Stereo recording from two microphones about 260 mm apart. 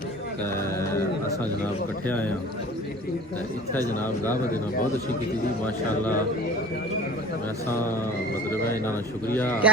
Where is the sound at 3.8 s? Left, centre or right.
Centre.